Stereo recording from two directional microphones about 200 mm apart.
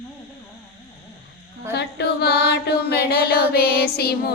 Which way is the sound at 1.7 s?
55° left (ahead or behind).